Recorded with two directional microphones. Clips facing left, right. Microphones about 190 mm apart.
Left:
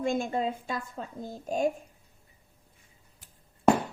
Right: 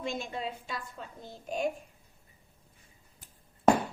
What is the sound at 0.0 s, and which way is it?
A woman's voice, 50° left (ahead or behind).